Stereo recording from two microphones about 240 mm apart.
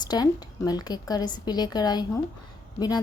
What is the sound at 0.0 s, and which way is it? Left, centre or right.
A woman's voice, centre.